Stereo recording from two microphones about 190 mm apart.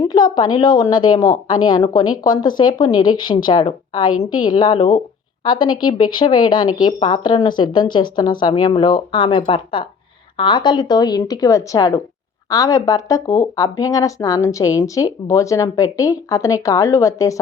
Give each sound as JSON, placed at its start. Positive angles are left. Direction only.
{"t": 0.0, "sound": "a woman's voice", "side_deg": 20}